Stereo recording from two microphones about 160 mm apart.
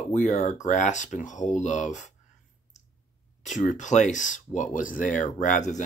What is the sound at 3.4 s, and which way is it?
Speech, 50° left (ahead or behind).